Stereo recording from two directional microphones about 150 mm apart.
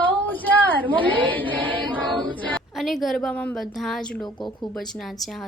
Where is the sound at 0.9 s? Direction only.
10° left (ahead or behind).